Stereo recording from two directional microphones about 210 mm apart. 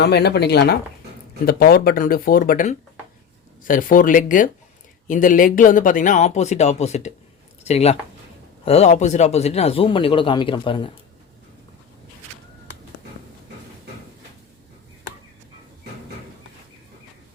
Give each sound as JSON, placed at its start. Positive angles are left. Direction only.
{"t": 0.0, "sound": "speech", "side_deg": 50}